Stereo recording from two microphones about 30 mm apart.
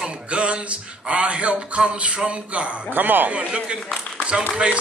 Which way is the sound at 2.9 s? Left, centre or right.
Right.